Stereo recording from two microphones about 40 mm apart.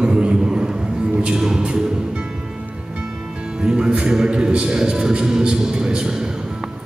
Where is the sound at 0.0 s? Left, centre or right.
Right.